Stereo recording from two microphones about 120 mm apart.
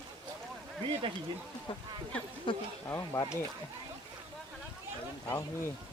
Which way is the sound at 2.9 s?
25° left (ahead or behind).